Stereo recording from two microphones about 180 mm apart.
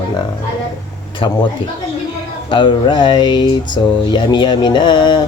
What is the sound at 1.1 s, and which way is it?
Speech, 25° left (ahead or behind).